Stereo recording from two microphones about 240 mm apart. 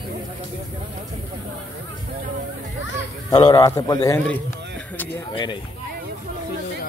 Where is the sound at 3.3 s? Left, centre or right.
Centre.